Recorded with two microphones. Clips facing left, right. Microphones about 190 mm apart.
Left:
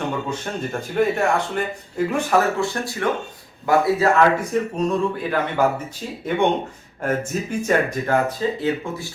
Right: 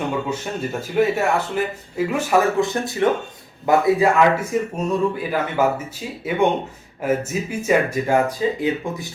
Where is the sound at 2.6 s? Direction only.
20° right (ahead or behind).